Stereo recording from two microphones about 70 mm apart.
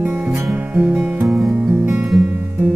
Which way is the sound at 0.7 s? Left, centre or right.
Right.